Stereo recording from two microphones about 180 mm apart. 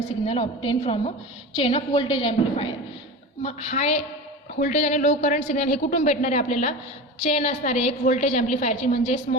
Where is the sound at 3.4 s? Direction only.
40° left (ahead or behind).